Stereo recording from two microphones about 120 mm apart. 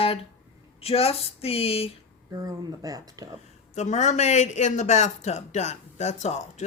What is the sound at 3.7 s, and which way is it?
A man's voice, 75° left (ahead or behind).